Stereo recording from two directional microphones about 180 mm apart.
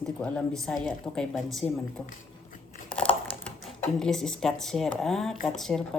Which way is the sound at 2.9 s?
5° left (ahead or behind).